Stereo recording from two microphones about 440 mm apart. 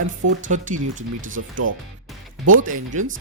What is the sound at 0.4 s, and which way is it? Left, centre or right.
Speech, right.